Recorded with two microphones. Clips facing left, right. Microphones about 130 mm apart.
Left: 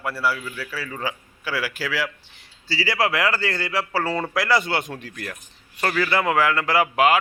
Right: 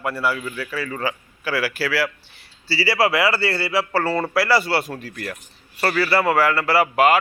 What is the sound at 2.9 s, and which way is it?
Speech, 10° right (ahead or behind).